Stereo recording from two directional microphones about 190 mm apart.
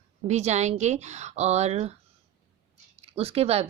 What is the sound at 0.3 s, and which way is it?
Speech, 35° right (ahead or behind).